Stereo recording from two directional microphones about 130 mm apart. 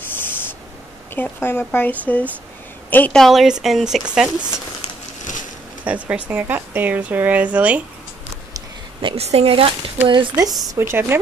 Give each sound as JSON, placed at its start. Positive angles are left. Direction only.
{"t": 1.1, "sound": "a woman's voice", "side_deg": 15}
{"t": 3.2, "sound": "speech", "side_deg": 0}
{"t": 5.9, "sound": "speech", "side_deg": -10}
{"t": 9.1, "sound": "a woman's voice", "side_deg": -50}
{"t": 10.0, "sound": "speech", "side_deg": -35}
{"t": 10.8, "sound": "speech", "side_deg": -20}